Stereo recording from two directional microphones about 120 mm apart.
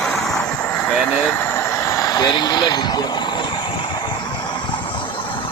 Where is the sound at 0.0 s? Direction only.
5° left (ahead or behind).